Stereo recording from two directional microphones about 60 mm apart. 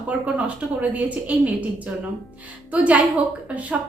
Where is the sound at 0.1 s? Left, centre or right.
Right.